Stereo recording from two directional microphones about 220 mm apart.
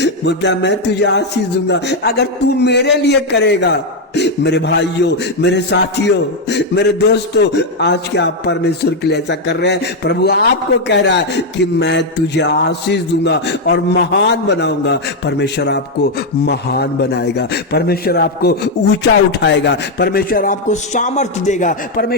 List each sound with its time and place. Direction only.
0.0 s a man's voice: 50° left (ahead or behind); by 22.0 s 35° left (ahead or behind)